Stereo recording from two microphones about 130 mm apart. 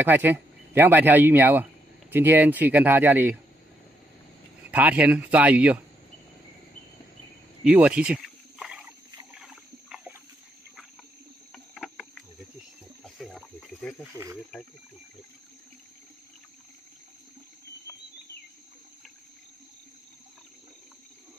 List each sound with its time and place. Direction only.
0.0 s speech: 15° right (ahead or behind)
4.6 s a man's voice: 10° right (ahead or behind)
7.6 s a sound: 10° right (ahead or behind)
11.5 s cricket: 5° left (ahead or behind)
13.0 s a sound: centre (ahead or behind)
14.1 s speech: 25° right (ahead or behind)